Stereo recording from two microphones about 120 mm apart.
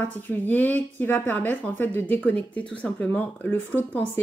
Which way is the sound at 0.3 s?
15° left (ahead or behind).